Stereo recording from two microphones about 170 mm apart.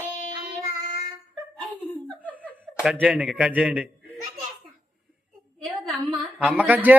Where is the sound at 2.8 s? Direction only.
10° right (ahead or behind).